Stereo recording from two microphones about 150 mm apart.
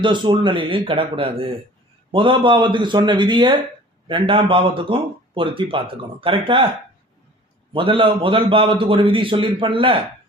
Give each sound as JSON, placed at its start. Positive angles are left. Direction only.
{"t": 0.0, "sound": "a man's voice", "side_deg": -30}
{"t": 7.7, "sound": "a man's voice", "side_deg": -35}